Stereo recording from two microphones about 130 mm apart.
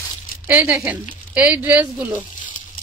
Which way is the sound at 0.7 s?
20° right (ahead or behind).